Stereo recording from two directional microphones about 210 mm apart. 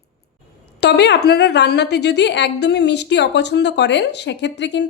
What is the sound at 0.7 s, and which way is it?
A woman's voice, 50° left (ahead or behind).